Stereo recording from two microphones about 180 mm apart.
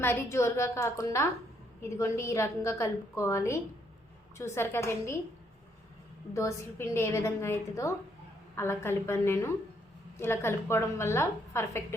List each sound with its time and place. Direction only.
0.0 s a woman's voice: 15° left (ahead or behind)
6.3 s a woman's voice: 15° left (ahead or behind)